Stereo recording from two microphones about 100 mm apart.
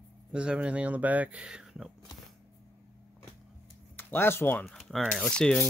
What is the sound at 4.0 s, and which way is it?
Speech, 20° left (ahead or behind).